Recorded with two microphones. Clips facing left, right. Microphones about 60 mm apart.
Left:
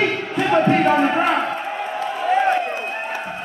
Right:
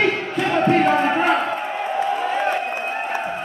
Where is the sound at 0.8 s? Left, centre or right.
Centre.